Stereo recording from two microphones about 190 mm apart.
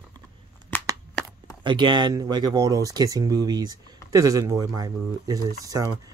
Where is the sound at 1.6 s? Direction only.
25° right (ahead or behind).